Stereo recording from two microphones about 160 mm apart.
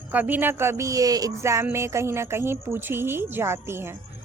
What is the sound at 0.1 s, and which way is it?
Speech, 10° right (ahead or behind).